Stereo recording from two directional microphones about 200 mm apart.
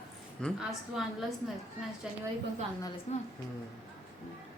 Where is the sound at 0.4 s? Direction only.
Centre (ahead or behind).